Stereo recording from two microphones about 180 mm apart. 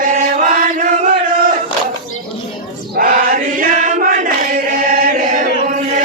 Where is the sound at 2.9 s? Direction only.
50° right (ahead or behind).